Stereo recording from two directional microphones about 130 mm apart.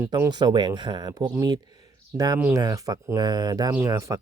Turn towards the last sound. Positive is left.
turn(degrees=-25)  # may be behind; listen again after turning